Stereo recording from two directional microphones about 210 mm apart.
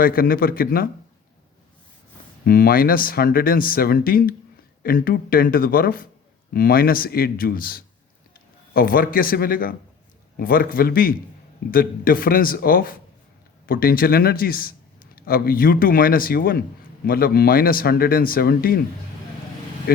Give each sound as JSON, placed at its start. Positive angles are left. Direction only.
{"t": 0.0, "sound": "a man's voice", "side_deg": 45}
{"t": 2.4, "sound": "a man's voice", "side_deg": 45}